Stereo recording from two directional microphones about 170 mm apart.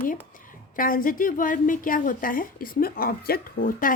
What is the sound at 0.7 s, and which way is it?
Speech, 55° left (ahead or behind).